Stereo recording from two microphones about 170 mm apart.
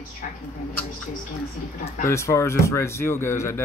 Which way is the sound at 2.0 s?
15° left (ahead or behind).